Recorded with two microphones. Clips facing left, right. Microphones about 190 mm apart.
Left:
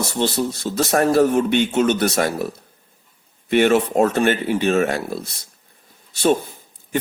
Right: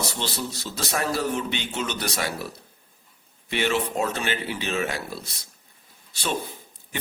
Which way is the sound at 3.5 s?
50° left (ahead or behind).